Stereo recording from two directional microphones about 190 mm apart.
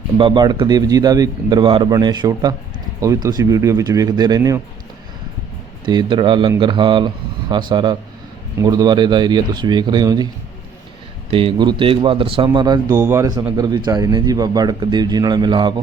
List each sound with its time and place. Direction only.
0.2 s speech: 25° right (ahead or behind)
5.8 s speech: 25° right (ahead or behind)
11.3 s speech: 30° right (ahead or behind)